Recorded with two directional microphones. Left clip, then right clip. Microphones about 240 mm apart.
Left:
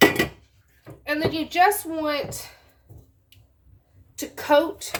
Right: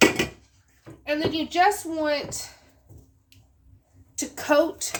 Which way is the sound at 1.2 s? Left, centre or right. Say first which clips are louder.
Left 2 dB; right.